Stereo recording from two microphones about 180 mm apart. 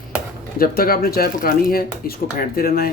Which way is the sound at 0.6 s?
55° left (ahead or behind).